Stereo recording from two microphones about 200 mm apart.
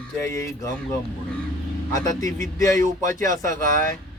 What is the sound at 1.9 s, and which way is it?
Speech, 15° left (ahead or behind).